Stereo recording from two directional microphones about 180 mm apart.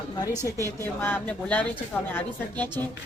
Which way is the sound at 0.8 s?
10° left (ahead or behind).